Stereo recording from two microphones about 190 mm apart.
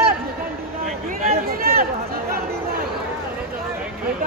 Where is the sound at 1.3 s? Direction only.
50° right (ahead or behind).